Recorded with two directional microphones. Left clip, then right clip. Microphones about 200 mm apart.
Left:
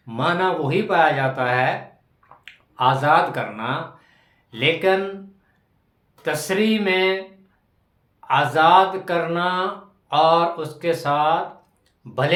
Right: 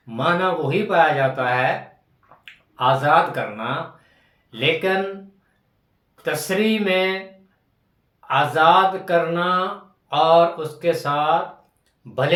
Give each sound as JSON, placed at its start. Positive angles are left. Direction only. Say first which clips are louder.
{"t": 0.0, "sound": "speech", "louder": "right 1 dB", "side_deg": 20}
{"t": 6.2, "sound": "speech", "louder": "even", "side_deg": 15}
{"t": 8.3, "sound": "speech", "louder": "even", "side_deg": 20}